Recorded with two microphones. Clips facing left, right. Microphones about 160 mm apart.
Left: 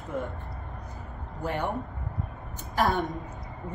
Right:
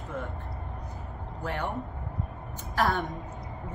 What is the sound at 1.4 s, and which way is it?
Speech, 15° left (ahead or behind).